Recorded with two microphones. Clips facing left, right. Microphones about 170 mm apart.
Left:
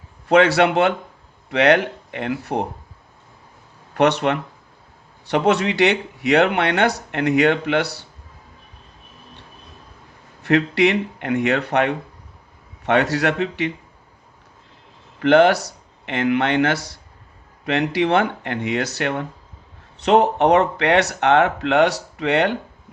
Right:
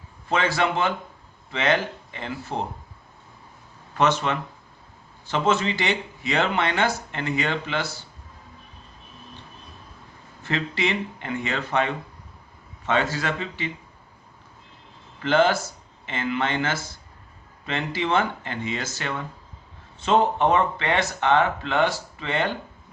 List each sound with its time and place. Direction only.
0.3 s speech: 75° left (ahead or behind)
3.9 s speech: 65° left (ahead or behind)
10.4 s speech: 70° left (ahead or behind)
15.2 s speech: 65° left (ahead or behind)